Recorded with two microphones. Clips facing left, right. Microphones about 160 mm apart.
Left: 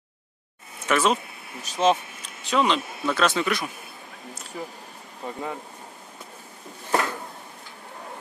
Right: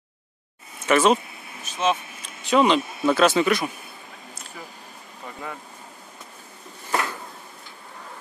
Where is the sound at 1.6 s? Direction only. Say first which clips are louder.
Left 3 dB; 35° left (ahead or behind).